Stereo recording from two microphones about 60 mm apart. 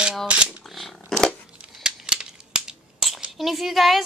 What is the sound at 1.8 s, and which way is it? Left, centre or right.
Scissors, centre.